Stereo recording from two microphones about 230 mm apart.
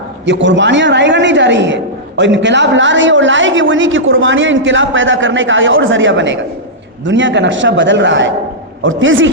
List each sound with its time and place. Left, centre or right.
0.3 s a man's voice: right